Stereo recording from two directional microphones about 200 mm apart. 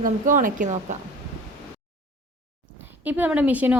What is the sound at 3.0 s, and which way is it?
Speech, 10° right (ahead or behind).